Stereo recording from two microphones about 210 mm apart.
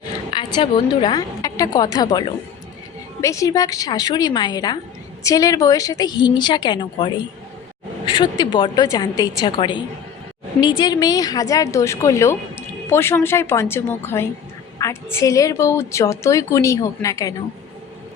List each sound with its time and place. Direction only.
0.3 s a woman's voice: 20° left (ahead or behind)